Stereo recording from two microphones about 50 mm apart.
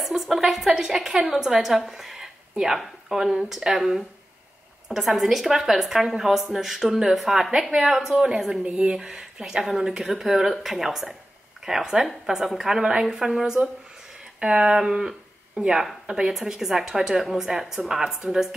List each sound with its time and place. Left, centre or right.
0.0 s a woman's voice: centre